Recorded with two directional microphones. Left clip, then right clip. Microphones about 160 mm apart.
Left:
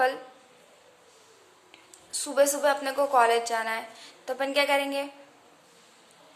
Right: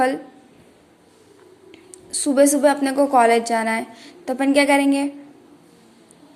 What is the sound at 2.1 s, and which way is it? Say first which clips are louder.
A woman's voice: right 8 dB; 25° right (ahead or behind).